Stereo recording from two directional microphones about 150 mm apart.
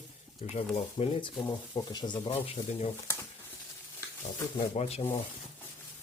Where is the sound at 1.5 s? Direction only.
25° left (ahead or behind); by 2.9 s 40° left (ahead or behind).